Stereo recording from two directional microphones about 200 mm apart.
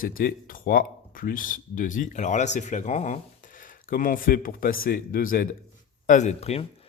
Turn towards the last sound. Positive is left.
turn(degrees=30)  # may be behind; listen again after turning